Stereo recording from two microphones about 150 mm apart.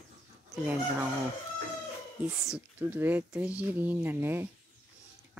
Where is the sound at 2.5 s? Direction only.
10° right (ahead or behind).